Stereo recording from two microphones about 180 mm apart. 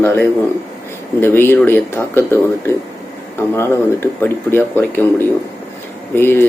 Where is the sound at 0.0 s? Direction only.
10° left (ahead or behind).